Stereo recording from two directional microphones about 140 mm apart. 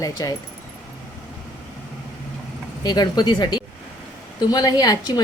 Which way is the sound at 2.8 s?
30° left (ahead or behind).